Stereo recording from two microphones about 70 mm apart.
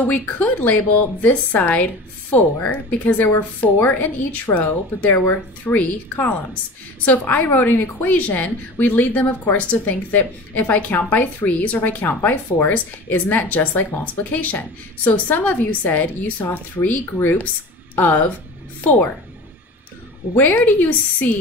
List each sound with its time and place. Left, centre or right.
0.0 s a woman's voice: left
20.3 s a woman's voice: left